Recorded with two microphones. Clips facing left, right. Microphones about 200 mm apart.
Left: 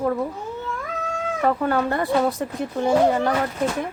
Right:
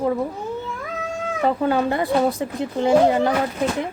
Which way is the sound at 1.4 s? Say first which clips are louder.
Right 2 dB; 20° right (ahead or behind).